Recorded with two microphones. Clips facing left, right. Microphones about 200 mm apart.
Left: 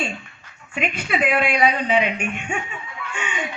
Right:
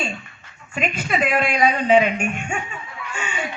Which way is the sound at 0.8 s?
40° right (ahead or behind).